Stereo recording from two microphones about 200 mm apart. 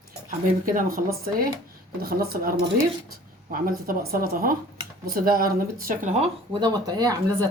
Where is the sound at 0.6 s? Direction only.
45° right (ahead or behind).